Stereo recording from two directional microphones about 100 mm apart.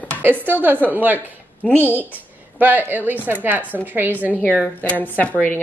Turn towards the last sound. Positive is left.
turn(degrees=20)  # may be behind; listen again after turning